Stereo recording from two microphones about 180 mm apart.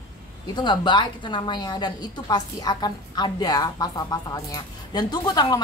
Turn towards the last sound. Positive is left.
turn(degrees=20)  # may be behind; listen again after turning